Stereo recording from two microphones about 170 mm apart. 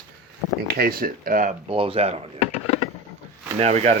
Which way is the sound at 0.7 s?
60° right (ahead or behind).